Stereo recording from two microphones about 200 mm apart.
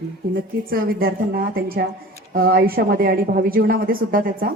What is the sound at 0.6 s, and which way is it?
Speech, 45° right (ahead or behind).